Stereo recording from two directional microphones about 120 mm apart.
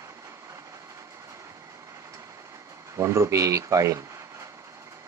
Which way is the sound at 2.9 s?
25° right (ahead or behind).